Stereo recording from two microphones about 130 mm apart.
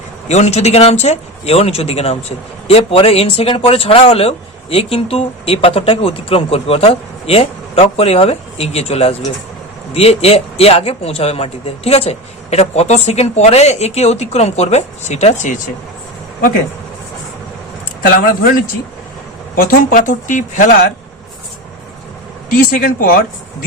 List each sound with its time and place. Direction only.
0.3 s a man's voice: 55° left (ahead or behind)
19.5 s speech: 90° left; by 20.7 s 75° left (ahead or behind)
22.4 s speech: 90° left